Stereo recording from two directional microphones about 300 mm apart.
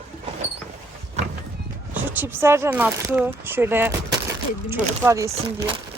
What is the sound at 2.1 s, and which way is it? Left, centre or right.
Speech, centre.